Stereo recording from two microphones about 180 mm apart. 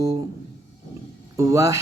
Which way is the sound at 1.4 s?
15° right (ahead or behind).